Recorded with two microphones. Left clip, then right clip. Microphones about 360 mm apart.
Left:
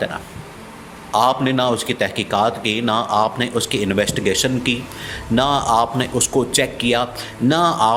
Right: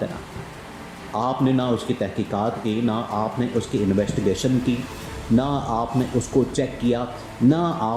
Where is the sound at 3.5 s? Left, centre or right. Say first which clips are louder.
Left 2 dB; left.